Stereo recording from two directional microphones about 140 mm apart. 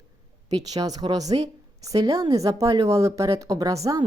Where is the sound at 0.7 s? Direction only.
25° right (ahead or behind).